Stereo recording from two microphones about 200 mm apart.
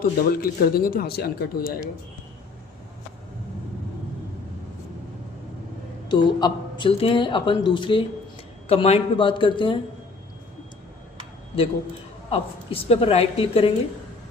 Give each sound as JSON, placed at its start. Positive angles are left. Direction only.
{"t": 0.0, "sound": "speech", "side_deg": 45}
{"t": 6.1, "sound": "speech", "side_deg": 20}
{"t": 12.3, "sound": "speech", "side_deg": 30}